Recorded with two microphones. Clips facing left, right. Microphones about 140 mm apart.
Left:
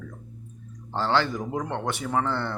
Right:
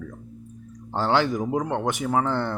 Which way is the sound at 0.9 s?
15° right (ahead or behind).